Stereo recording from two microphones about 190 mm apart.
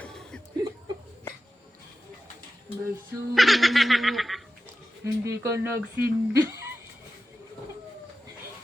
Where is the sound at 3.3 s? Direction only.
Centre (ahead or behind).